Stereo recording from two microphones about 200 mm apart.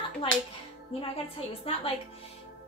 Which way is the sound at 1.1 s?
30° left (ahead or behind).